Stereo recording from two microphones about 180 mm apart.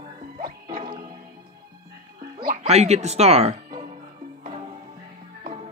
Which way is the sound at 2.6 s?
35° right (ahead or behind).